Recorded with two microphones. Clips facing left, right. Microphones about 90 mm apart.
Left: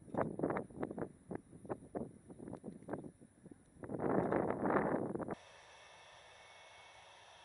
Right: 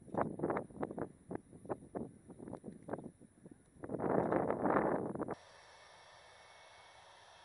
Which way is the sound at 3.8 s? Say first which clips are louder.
Right 1 dB; 35° right (ahead or behind).